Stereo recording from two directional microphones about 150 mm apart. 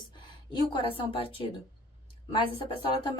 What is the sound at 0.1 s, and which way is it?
A woman's voice, 30° left (ahead or behind).